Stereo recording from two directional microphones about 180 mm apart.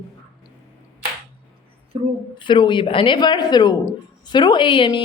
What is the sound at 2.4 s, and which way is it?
A woman's voice, 25° left (ahead or behind).